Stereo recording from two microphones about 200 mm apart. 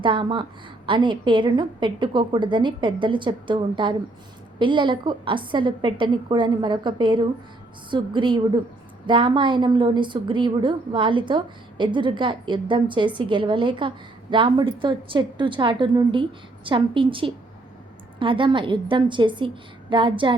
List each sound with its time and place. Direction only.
0.0 s a woman's voice: 25° right (ahead or behind)